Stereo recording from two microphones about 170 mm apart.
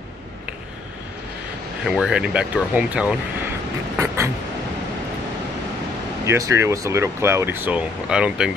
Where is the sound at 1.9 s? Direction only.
5° right (ahead or behind).